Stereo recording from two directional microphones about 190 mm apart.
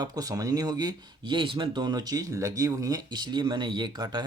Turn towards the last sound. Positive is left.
turn(degrees=-25)  # may be behind; listen again after turning